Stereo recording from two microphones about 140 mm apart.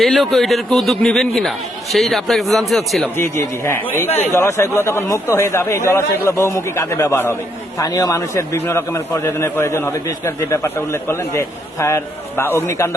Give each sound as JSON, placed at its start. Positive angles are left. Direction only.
{"t": 0.0, "sound": "a man's voice", "side_deg": 0}
{"t": 3.2, "sound": "a man's voice", "side_deg": 20}